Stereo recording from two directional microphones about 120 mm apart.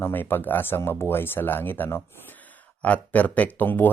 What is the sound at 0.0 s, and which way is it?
Speech, 15° left (ahead or behind).